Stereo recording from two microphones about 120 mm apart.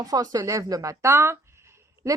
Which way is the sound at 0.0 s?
30° right (ahead or behind).